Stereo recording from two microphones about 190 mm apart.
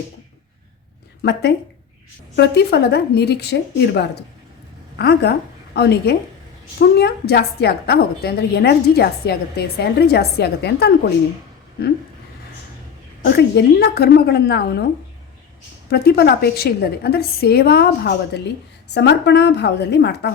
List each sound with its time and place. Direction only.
1.2 s a woman's voice: 60° left (ahead or behind)
13.2 s a woman's voice: 55° left (ahead or behind)
15.9 s a woman's voice: 55° left (ahead or behind)